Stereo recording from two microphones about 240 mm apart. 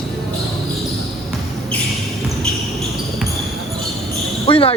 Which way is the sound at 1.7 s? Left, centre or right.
Centre.